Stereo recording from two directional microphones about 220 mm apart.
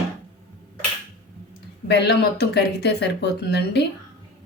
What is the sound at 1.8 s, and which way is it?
Speech, 50° left (ahead or behind).